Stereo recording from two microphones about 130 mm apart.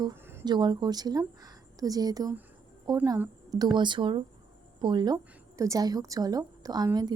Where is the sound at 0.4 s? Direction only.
35° right (ahead or behind).